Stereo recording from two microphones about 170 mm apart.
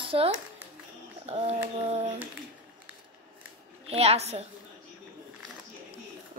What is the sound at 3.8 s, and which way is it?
Speech, 35° right (ahead or behind).